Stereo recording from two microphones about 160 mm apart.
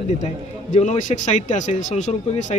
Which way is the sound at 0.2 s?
45° left (ahead or behind).